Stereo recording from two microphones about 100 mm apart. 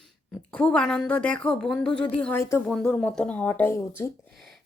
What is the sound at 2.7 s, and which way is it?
Speech, 5° left (ahead or behind).